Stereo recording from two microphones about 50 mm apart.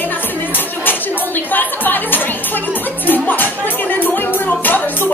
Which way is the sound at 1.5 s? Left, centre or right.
Left.